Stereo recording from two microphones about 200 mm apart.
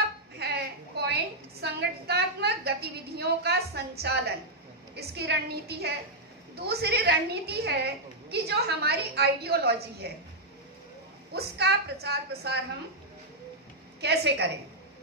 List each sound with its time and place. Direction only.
0.4 s a sound: 55° right (ahead or behind)
1.6 s a woman's voice: 55° right (ahead or behind)
11.3 s a woman's voice: 55° right (ahead or behind)
14.0 s a woman's voice: 55° right (ahead or behind)